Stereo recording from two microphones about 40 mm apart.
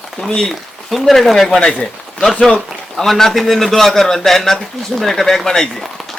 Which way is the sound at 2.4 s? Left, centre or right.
Centre.